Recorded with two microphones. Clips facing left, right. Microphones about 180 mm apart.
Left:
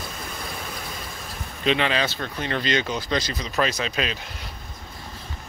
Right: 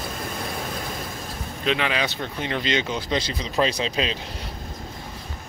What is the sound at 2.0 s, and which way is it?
Speech, 20° right (ahead or behind).